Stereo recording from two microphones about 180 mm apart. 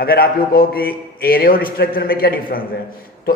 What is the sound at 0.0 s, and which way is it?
A man's voice, 55° left (ahead or behind).